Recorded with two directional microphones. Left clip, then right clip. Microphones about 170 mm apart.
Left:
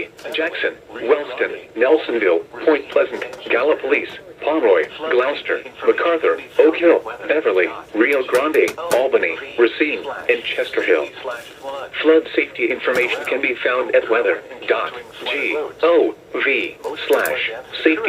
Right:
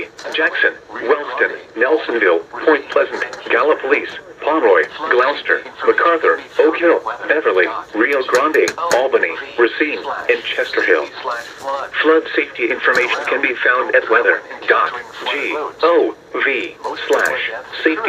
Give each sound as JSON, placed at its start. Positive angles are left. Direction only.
{"t": 0.0, "sound": "speech", "side_deg": 30}